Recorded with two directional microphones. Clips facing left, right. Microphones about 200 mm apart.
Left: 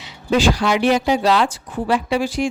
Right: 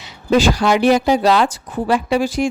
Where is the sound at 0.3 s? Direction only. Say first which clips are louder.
Right 3 dB; 40° right (ahead or behind).